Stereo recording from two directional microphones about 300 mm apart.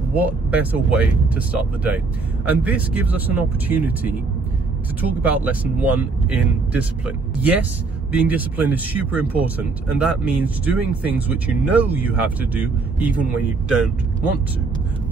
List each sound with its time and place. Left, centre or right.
0.1 s speech: centre
2.4 s speech: centre
5.2 s speech: centre